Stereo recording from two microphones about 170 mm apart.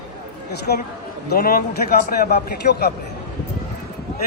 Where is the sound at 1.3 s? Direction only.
60° left (ahead or behind).